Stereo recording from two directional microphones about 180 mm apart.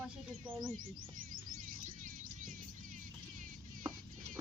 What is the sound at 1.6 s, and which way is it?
Music, 50° right (ahead or behind).